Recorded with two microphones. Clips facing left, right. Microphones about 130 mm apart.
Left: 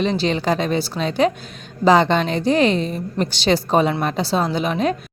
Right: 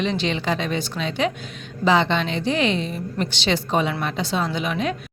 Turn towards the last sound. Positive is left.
turn(degrees=35)  # may be behind; listen again after turning